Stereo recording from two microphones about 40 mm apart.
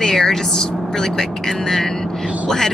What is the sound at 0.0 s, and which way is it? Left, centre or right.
Speech, centre.